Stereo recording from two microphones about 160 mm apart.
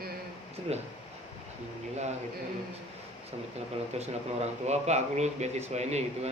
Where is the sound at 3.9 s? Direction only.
40° right (ahead or behind).